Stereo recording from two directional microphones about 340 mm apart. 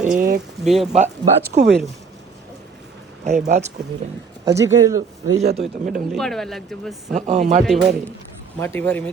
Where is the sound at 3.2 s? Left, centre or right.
Right.